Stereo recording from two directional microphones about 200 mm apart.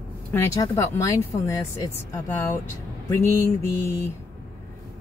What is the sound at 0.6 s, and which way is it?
Speech, 15° left (ahead or behind).